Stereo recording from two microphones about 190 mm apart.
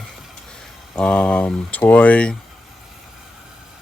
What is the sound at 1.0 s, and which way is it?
Speech, 5° left (ahead or behind).